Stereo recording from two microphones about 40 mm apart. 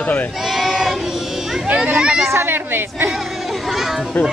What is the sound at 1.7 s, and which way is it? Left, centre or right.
Speech, right.